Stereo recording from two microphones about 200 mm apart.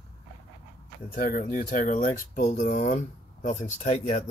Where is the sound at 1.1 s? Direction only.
45° left (ahead or behind).